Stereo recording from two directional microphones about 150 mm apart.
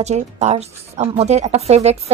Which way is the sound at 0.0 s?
50° right (ahead or behind).